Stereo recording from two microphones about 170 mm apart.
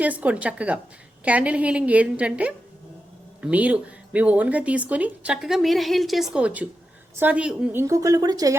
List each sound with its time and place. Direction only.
0.0 s speech: 10° right (ahead or behind)